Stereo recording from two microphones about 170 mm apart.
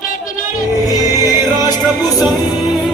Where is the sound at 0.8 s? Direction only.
20° left (ahead or behind).